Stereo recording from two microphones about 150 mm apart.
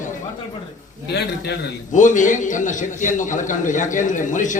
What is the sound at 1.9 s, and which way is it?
A man's voice, 55° left (ahead or behind).